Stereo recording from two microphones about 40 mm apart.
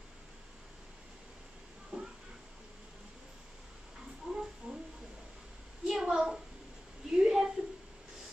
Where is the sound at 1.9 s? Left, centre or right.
Right.